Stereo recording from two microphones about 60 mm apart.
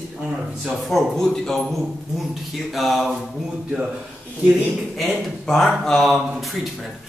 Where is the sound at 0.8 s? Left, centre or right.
Centre.